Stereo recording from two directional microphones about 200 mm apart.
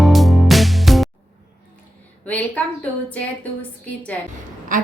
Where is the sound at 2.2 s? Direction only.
5° left (ahead or behind).